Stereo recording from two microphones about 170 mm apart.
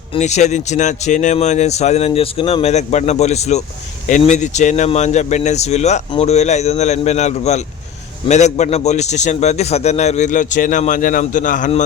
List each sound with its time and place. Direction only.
0.2 s a man's voice: 45° left (ahead or behind)